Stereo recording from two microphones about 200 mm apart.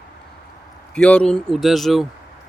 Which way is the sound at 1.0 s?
5° left (ahead or behind).